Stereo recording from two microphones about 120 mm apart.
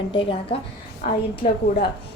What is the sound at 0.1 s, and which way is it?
Speech, 45° left (ahead or behind).